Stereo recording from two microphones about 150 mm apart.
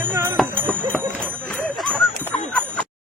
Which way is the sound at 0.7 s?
5° left (ahead or behind).